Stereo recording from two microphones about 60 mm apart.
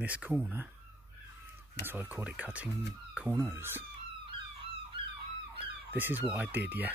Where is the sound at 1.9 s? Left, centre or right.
Right.